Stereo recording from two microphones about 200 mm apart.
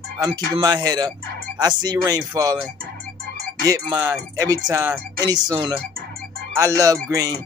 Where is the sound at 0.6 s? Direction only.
20° right (ahead or behind).